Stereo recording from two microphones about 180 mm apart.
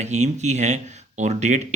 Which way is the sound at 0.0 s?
40° right (ahead or behind).